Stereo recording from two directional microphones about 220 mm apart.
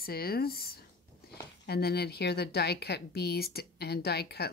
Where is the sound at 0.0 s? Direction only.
45° left (ahead or behind).